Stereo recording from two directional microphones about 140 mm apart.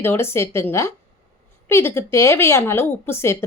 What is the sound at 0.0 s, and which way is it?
A woman's voice, 15° left (ahead or behind).